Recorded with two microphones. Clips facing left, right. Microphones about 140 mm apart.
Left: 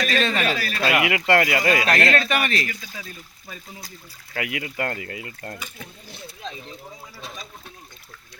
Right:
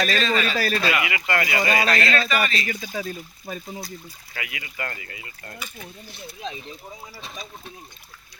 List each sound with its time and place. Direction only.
0.2 s speech: 60° left (ahead or behind)
0.5 s a sound: 40° right (ahead or behind)
0.9 s speech: 65° left (ahead or behind)
2.6 s speech: 40° right (ahead or behind)
4.4 s speech: 65° left (ahead or behind)
6.4 s speech: 5° right (ahead or behind)